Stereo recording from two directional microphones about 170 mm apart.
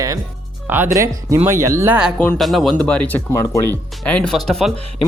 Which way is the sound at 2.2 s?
5° left (ahead or behind).